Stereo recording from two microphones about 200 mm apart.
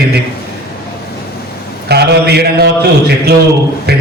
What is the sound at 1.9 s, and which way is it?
Speech, 55° right (ahead or behind).